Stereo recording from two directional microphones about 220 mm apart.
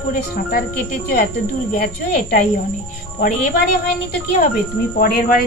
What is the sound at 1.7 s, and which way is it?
Speech, 40° left (ahead or behind).